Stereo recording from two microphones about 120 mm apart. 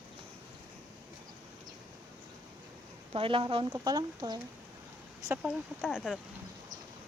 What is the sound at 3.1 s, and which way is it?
Speech, 45° right (ahead or behind).